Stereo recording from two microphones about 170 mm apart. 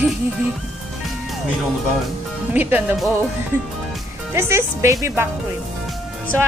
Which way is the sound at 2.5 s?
10° right (ahead or behind).